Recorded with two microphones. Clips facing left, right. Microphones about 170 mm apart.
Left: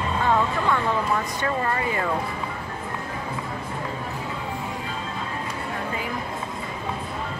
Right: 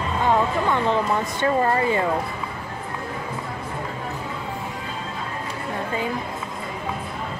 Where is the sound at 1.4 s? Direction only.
30° right (ahead or behind).